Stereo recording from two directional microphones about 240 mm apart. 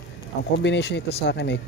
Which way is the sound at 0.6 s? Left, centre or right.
Left.